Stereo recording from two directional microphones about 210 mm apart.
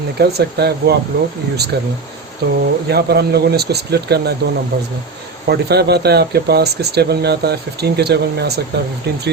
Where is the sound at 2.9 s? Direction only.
50° right (ahead or behind).